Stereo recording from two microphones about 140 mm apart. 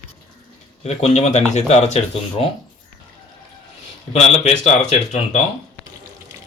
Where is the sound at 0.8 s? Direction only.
50° left (ahead or behind).